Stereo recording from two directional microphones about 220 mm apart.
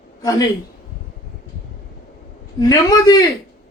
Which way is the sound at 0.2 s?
15° left (ahead or behind).